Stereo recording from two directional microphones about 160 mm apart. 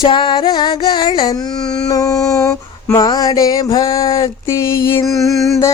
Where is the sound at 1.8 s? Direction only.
20° left (ahead or behind).